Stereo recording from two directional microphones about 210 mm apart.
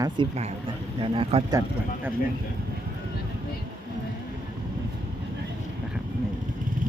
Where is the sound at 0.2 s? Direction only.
25° right (ahead or behind).